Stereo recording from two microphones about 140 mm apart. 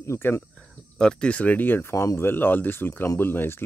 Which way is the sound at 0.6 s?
5° left (ahead or behind).